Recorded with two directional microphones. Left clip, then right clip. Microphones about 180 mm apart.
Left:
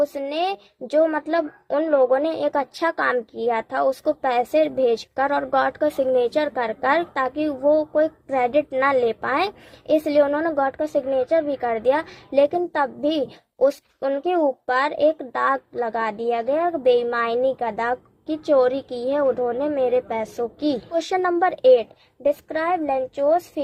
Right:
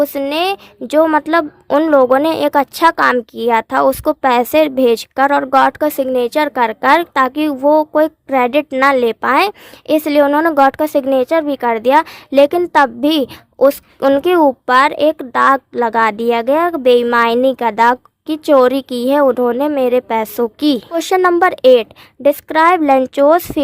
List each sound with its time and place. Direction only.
0.0 s a woman's voice: 40° right (ahead or behind)